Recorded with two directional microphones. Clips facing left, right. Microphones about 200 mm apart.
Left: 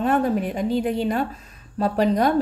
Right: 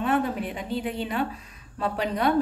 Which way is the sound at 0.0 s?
40° left (ahead or behind).